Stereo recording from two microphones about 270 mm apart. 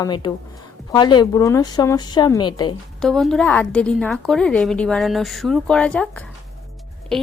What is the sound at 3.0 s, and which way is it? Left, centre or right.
A woman's voice, centre.